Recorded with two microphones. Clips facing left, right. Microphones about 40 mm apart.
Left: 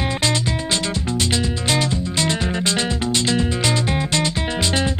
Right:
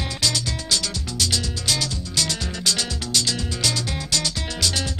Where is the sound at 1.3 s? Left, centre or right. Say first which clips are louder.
Left 6 dB; left.